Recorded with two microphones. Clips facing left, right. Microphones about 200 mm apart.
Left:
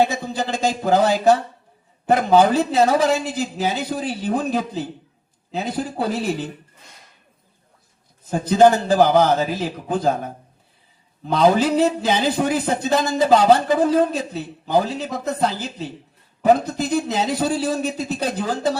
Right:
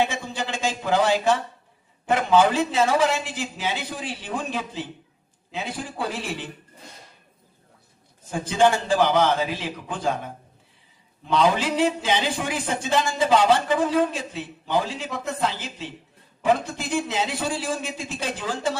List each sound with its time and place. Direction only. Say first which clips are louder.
0.0 s a man's voice: left 5 dB; 40° left (ahead or behind)
8.3 s a man's voice: left 6 dB; 40° left (ahead or behind)